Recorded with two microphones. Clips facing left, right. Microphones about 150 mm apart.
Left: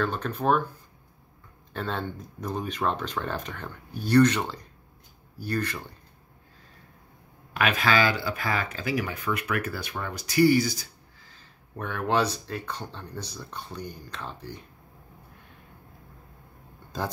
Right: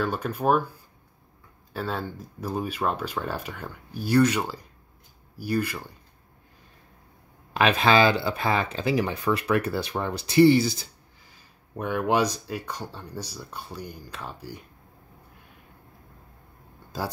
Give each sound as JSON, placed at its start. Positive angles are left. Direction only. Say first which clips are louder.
{"t": 0.0, "sound": "speech", "louder": "right 1 dB", "side_deg": -10}
{"t": 1.7, "sound": "speech", "louder": "right 1 dB", "side_deg": -5}
{"t": 7.5, "sound": "speech", "louder": "right 4 dB", "side_deg": -25}
{"t": 11.2, "sound": "speech", "louder": "left 1 dB", "side_deg": -15}